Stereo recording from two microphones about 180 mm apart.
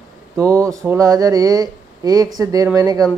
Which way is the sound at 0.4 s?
15° right (ahead or behind).